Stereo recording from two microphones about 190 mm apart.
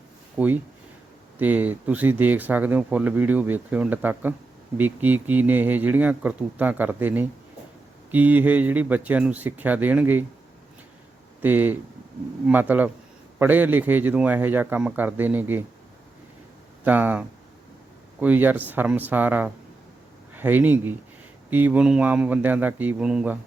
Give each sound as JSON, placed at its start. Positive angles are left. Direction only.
{"t": 0.3, "sound": "speech", "side_deg": -10}
{"t": 11.4, "sound": "speech", "side_deg": -10}
{"t": 16.8, "sound": "speech", "side_deg": -10}